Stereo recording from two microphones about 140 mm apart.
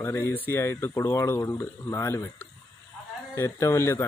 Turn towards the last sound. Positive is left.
turn(degrees=20)  # may be behind; listen again after turning